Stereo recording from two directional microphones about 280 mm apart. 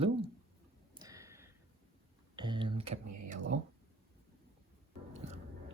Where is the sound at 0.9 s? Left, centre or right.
Centre.